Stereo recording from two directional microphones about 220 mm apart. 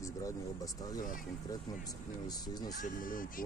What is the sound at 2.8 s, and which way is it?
Speech, 40° left (ahead or behind).